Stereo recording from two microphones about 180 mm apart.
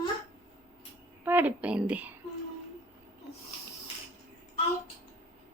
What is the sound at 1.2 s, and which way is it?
Speech, 10° right (ahead or behind).